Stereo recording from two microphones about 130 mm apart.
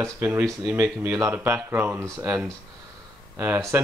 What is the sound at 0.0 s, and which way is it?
Speech, 15° right (ahead or behind).